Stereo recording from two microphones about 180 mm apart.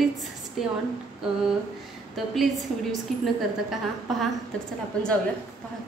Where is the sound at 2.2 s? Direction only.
Centre (ahead or behind).